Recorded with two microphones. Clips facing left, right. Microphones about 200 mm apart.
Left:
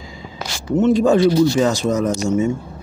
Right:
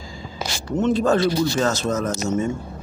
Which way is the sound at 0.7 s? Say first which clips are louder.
Left 5 dB; 10° left (ahead or behind).